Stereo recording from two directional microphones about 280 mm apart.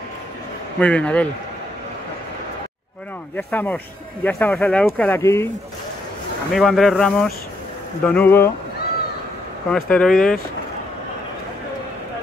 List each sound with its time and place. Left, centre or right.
0.7 s speech: centre
3.3 s speech: centre
6.5 s speech: centre
9.8 s speech: centre